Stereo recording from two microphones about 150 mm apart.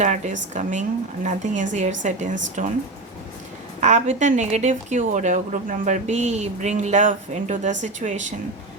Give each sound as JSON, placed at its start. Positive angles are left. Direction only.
{"t": 0.0, "sound": "a woman's voice", "side_deg": -55}
{"t": 3.8, "sound": "a woman's voice", "side_deg": -50}